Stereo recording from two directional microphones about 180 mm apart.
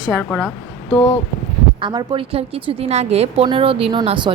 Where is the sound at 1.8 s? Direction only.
25° right (ahead or behind).